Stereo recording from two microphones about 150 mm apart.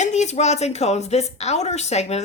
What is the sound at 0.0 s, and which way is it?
A woman's voice, 50° left (ahead or behind).